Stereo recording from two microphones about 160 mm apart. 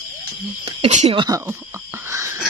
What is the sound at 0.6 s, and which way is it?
Speech, 40° right (ahead or behind).